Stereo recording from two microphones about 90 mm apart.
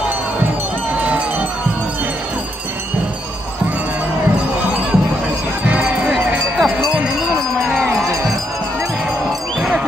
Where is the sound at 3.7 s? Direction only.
15° right (ahead or behind).